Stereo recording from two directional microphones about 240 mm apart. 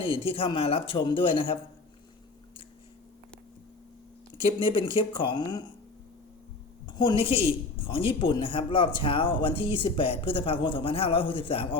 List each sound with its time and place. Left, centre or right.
0.0 s a woman's voice: left
4.6 s a woman's voice: left
6.8 s a woman's voice: centre